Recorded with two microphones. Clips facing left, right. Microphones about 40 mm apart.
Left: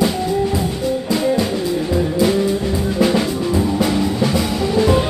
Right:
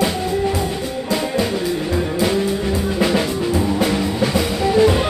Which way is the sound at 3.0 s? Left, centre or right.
Centre.